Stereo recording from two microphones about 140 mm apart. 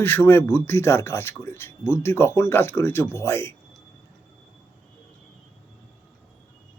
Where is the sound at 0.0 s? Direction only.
15° left (ahead or behind).